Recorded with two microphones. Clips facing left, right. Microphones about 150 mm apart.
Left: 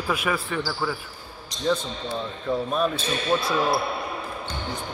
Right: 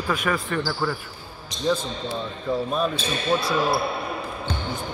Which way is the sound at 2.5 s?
Centre (ahead or behind).